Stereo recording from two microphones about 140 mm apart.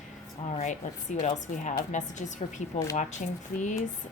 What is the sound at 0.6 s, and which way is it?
Speech, 60° left (ahead or behind).